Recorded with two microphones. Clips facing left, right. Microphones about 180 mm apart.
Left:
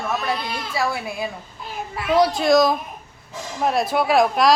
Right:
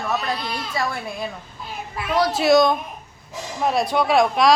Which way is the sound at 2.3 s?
5° right (ahead or behind).